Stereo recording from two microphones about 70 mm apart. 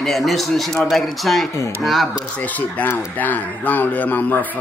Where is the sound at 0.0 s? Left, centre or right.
Centre.